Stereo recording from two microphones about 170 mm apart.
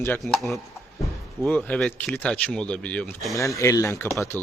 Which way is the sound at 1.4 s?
5° left (ahead or behind).